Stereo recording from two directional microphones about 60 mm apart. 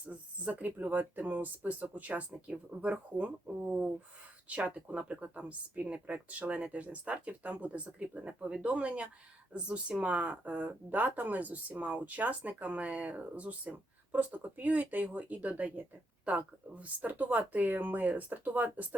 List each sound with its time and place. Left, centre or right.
0.1 s a sound: right
0.8 s speech: right
17.0 s speech: right